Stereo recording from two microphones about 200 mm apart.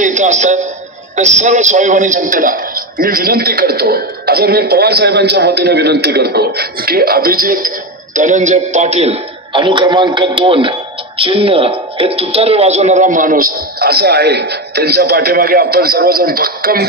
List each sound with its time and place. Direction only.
0.0 s a man's voice: 35° right (ahead or behind)